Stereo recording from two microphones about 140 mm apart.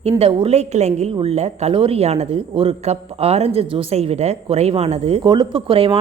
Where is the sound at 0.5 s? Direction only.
50° right (ahead or behind).